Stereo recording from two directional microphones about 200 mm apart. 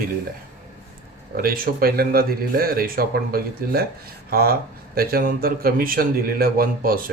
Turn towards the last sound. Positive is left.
turn(degrees=-45)  # may be behind; listen again after turning